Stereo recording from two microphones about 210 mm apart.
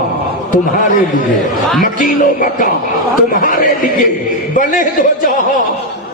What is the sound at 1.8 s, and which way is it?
Speech, 40° left (ahead or behind).